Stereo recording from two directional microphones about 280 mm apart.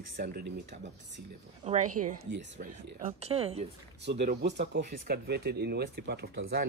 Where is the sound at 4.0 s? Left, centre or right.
Right.